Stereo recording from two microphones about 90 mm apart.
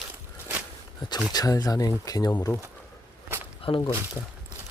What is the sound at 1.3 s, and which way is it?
Speech, 40° left (ahead or behind).